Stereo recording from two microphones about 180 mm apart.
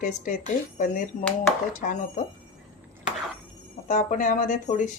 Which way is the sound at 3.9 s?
45° left (ahead or behind).